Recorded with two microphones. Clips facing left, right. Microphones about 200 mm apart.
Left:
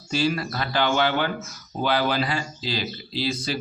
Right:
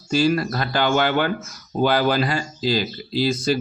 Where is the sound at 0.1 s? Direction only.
45° right (ahead or behind).